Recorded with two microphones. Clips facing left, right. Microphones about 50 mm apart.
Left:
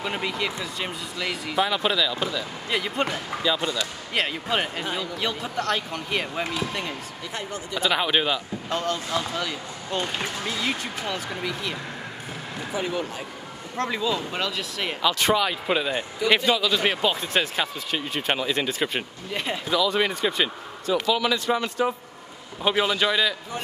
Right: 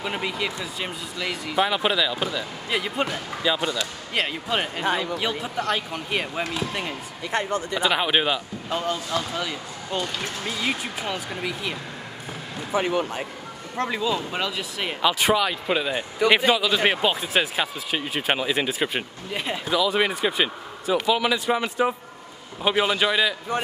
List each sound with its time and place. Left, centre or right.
0.0 s speech: centre
1.7 s speech: centre
3.4 s speech: centre
3.7 s speech: centre
7.3 s speech: right
7.8 s speech: centre
12.7 s speech: right
13.7 s speech: centre
15.3 s speech: centre
16.3 s speech: centre